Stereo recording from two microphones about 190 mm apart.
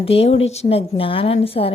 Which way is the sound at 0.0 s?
30° left (ahead or behind).